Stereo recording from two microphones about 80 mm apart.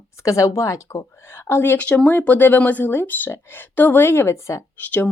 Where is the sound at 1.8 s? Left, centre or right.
Centre; by 4.6 s left.